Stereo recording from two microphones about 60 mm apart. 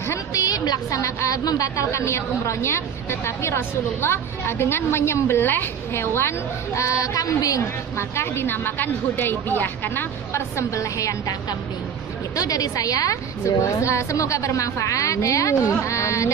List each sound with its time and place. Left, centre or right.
0.3 s a woman's voice: left
1.9 s a woman's voice: left
8.2 s a woman's voice: left
10.7 s a woman's voice: left
12.4 s a woman's voice: left